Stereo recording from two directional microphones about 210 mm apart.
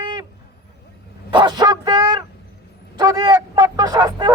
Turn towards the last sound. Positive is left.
turn(degrees=-20)  # may be behind; listen again after turning